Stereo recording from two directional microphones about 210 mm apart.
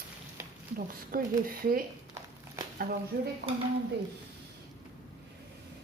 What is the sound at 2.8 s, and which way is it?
Speech, 50° right (ahead or behind).